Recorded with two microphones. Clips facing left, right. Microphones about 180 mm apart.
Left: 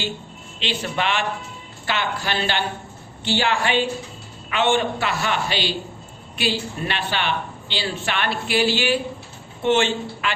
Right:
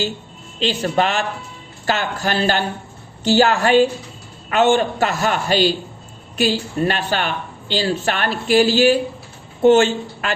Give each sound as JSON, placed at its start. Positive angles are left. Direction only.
{"t": 0.6, "sound": "a woman's voice", "side_deg": -40}